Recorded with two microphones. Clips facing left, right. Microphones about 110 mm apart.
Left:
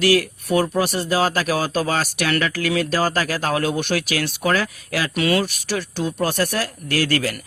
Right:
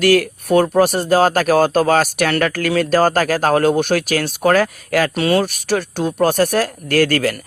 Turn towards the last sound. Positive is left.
turn(degrees=-50)  # may be behind; listen again after turning